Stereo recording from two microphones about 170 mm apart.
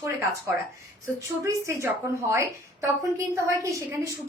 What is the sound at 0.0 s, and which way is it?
Speech, 15° right (ahead or behind).